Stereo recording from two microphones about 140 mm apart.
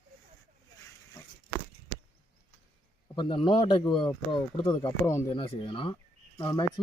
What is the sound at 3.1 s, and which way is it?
Speech, 35° left (ahead or behind).